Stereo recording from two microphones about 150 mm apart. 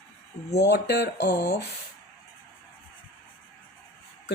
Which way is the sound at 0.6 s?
90° left.